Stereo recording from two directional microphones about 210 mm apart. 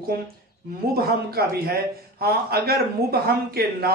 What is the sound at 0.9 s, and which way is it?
Speech, 45° right (ahead or behind).